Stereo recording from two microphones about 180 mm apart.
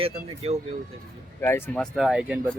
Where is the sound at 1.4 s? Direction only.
15° left (ahead or behind).